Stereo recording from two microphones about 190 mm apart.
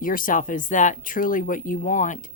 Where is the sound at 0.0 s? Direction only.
45° left (ahead or behind).